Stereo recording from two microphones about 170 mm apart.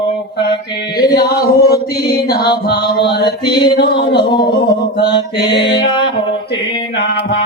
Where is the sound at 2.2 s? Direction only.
70° left (ahead or behind).